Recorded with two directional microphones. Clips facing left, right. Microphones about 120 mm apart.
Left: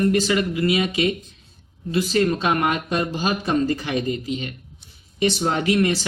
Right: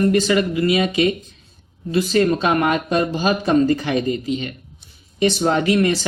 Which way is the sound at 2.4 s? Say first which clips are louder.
Right 3 dB; 30° right (ahead or behind).